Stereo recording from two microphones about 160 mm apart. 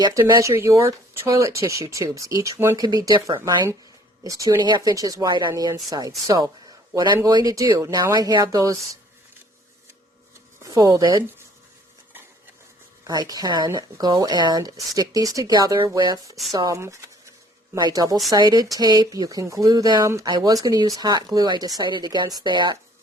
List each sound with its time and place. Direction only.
0.0 s speech: 20° right (ahead or behind)
10.6 s speech: 20° right (ahead or behind)
13.1 s speech: 25° right (ahead or behind)